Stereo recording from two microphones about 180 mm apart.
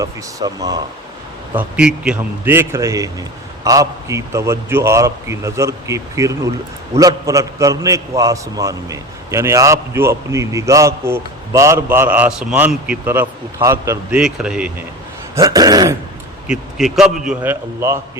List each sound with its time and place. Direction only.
0.0 s speech: 20° right (ahead or behind)
1.5 s a man's voice: 5° right (ahead or behind)
14.2 s a man's voice: 5° right (ahead or behind)
15.4 s speech: 20° right (ahead or behind)
16.5 s a man's voice: centre (ahead or behind)